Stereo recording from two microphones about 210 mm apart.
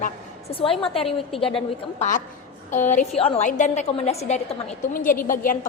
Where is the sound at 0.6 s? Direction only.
25° left (ahead or behind).